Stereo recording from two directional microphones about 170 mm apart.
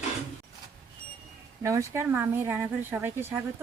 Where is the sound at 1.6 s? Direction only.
15° right (ahead or behind).